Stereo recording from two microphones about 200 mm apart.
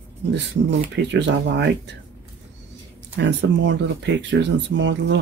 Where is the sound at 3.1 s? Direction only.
65° right (ahead or behind).